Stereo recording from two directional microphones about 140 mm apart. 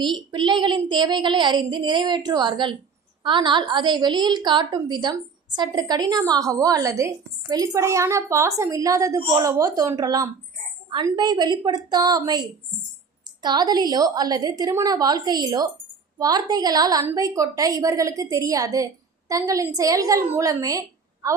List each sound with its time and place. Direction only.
0.3 s child singing: 35° right (ahead or behind)
5.5 s a woman's voice: 30° right (ahead or behind)